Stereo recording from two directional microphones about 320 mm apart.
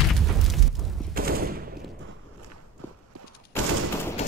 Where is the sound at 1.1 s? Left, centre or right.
Right.